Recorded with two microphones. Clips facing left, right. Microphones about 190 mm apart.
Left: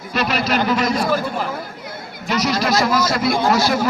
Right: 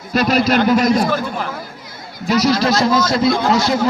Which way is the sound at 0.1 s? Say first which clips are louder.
Right 5 dB; 40° right (ahead or behind).